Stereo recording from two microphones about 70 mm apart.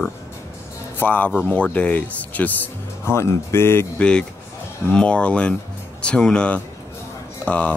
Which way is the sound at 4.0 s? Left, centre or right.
Centre.